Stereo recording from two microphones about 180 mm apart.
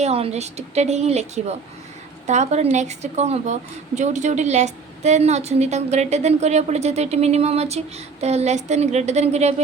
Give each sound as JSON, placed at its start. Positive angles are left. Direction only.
{"t": 0.0, "sound": "a woman's voice", "side_deg": -35}